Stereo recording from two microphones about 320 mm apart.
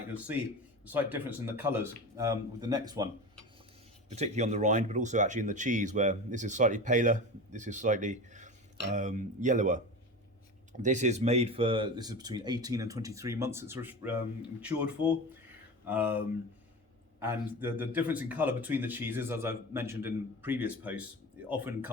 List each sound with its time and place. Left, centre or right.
0.1 s a man's voice: centre
4.1 s speech: right